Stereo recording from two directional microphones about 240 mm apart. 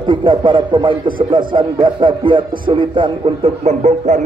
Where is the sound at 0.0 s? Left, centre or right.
Right.